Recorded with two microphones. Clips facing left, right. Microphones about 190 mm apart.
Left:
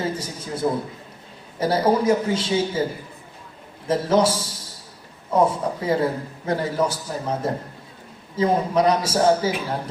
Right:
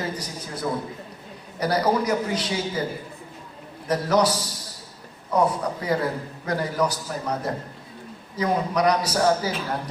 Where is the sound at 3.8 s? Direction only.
25° left (ahead or behind).